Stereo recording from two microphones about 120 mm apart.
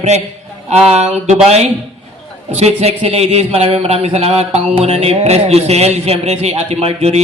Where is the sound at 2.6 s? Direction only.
60° right (ahead or behind).